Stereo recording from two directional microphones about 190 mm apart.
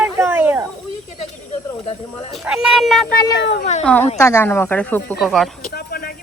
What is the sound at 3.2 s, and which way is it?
Speech, 60° left (ahead or behind).